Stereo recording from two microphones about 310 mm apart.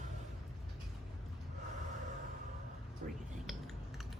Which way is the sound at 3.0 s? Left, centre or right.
Right.